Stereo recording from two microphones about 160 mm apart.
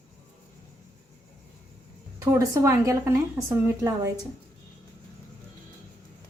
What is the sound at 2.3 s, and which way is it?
A woman's voice, 20° right (ahead or behind).